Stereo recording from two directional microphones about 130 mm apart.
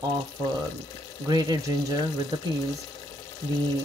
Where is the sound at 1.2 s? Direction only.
30° right (ahead or behind).